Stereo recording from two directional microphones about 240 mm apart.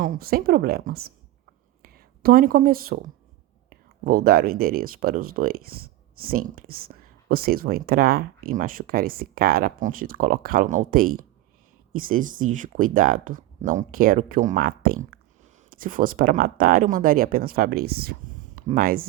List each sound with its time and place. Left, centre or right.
0.0 s speech: right